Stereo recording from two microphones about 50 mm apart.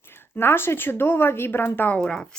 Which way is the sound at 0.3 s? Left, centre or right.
Left.